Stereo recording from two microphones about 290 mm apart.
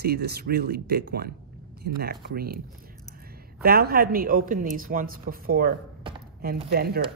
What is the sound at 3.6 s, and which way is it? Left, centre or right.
A woman's voice, right.